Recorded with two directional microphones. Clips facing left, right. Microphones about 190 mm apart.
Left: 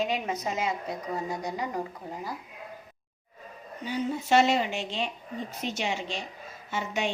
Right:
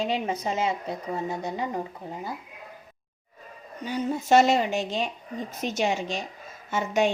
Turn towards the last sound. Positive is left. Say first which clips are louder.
# right 6 dB
turn(degrees=-45)  # may be behind; listen again after turning